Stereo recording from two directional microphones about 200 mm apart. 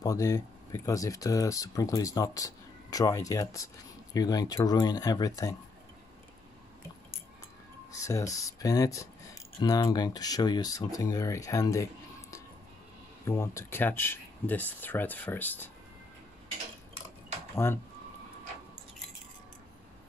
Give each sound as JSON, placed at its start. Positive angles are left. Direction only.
{"t": 0.0, "sound": "speech", "side_deg": 15}
{"t": 7.9, "sound": "speech", "side_deg": 15}
{"t": 17.6, "sound": "speech", "side_deg": 10}